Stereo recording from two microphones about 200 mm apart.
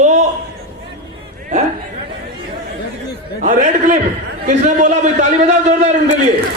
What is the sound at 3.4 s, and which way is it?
A man's voice, 40° right (ahead or behind).